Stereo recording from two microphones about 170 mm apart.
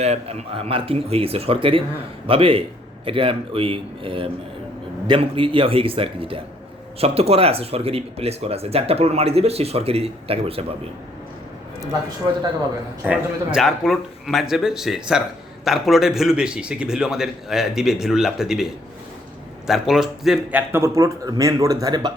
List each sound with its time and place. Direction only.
0.0 s speech: 40° right (ahead or behind)
13.1 s a man's voice: centre (ahead or behind); by 22.1 s 25° right (ahead or behind)